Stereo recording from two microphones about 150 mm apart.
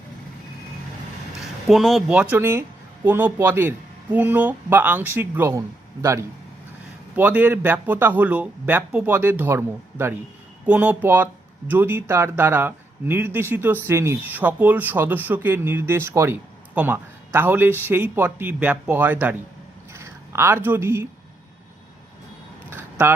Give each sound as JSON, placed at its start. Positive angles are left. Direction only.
{"t": 1.4, "sound": "speech", "side_deg": 0}
{"t": 2.3, "sound": "speech", "side_deg": -15}
{"t": 22.7, "sound": "a sound", "side_deg": -15}